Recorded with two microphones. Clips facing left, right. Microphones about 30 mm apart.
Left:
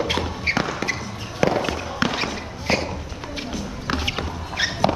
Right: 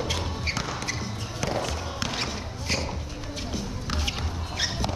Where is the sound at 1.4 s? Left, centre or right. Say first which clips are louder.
Left 9 dB; left.